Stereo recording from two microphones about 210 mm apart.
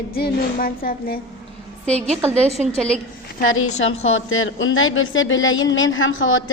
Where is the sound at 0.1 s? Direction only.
45° left (ahead or behind).